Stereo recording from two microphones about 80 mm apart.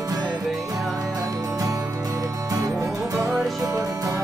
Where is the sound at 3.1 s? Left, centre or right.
Right.